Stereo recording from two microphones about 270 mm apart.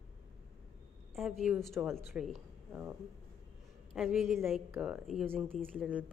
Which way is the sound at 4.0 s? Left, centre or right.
Centre.